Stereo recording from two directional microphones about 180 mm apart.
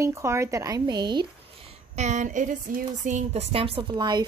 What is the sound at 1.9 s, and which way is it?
A woman's voice, 40° right (ahead or behind).